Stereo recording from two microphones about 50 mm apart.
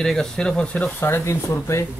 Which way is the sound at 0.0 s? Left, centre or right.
Centre.